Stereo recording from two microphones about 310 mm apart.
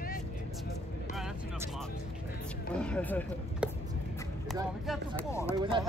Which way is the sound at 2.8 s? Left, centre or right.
Centre.